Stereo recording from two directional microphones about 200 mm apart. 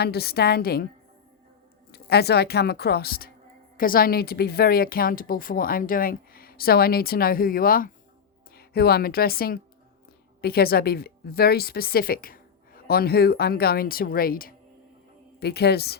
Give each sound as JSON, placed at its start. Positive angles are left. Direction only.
{"t": 0.0, "sound": "a woman's voice", "side_deg": 50}
{"t": 1.9, "sound": "a woman's voice", "side_deg": 55}